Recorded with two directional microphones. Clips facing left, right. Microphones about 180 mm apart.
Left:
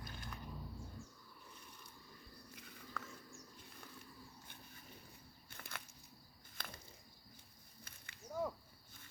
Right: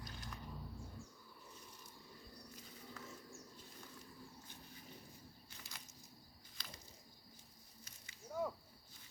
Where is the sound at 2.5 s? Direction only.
65° left (ahead or behind).